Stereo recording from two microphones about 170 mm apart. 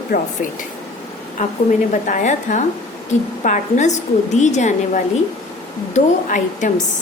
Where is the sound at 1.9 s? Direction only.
50° left (ahead or behind).